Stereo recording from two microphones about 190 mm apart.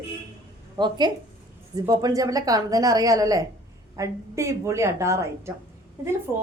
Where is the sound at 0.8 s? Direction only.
20° right (ahead or behind).